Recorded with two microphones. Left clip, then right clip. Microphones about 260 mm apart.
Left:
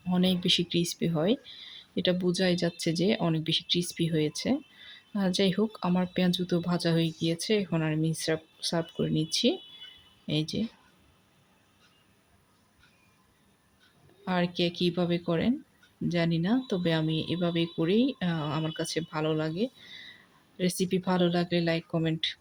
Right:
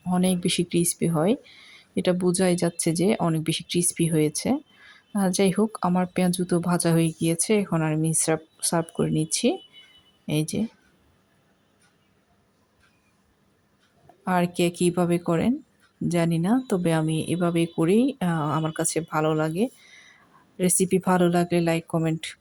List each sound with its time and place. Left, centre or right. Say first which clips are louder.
0.1 s speech: right 1 dB; centre
14.3 s speech: right 5 dB; centre